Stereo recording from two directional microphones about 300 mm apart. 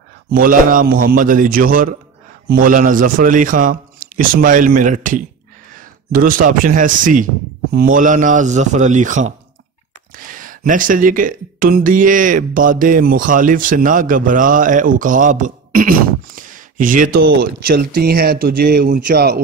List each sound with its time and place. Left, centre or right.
0.3 s speech: right